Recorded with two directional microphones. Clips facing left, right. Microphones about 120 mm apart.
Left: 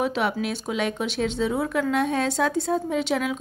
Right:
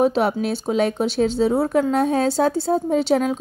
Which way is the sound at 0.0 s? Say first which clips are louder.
Right 6 dB; 35° right (ahead or behind).